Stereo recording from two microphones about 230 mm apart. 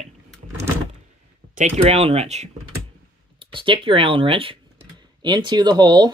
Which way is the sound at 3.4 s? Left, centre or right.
Right.